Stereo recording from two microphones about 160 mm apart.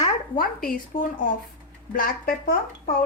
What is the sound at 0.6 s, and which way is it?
A woman's voice, 60° left (ahead or behind).